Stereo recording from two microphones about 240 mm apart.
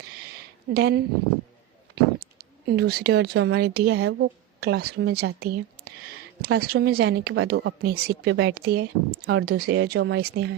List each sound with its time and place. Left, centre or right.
0.7 s speech: right
2.1 s speech: right